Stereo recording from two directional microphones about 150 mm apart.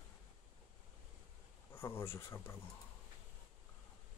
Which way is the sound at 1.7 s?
15° left (ahead or behind).